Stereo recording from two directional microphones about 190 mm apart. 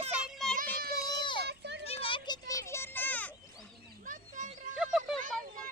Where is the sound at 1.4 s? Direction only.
60° right (ahead or behind).